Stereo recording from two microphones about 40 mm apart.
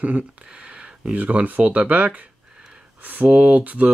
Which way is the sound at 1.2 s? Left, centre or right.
Right.